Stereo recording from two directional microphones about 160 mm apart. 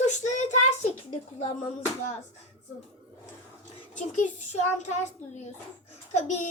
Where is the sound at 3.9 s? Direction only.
50° left (ahead or behind).